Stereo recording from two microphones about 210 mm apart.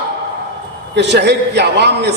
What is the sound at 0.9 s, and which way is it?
A man's voice, 55° right (ahead or behind).